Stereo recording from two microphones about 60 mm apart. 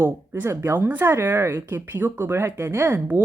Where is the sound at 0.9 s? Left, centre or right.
Right.